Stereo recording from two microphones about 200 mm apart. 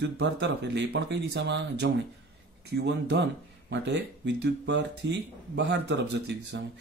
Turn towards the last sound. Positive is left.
turn(degrees=-60)  # may be behind; listen again after turning